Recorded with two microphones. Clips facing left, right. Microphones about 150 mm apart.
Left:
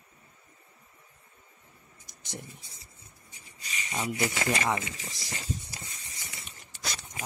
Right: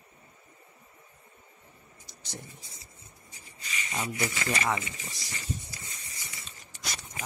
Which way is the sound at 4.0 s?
15° left (ahead or behind).